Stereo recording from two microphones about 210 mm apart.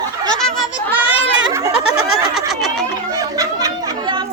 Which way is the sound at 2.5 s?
Centre (ahead or behind).